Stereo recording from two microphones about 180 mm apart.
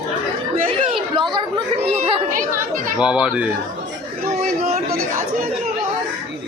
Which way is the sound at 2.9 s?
5° right (ahead or behind).